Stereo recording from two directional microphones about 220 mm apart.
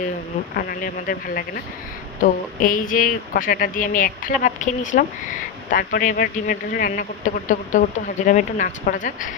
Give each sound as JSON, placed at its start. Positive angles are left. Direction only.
{"t": 0.5, "sound": "speech", "side_deg": 40}